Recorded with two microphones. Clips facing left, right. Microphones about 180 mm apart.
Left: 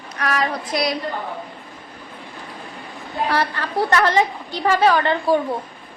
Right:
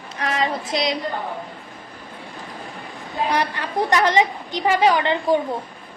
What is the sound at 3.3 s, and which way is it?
A woman's voice, 15° right (ahead or behind).